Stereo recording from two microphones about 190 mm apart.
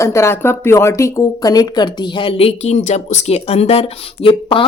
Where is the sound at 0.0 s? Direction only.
15° left (ahead or behind).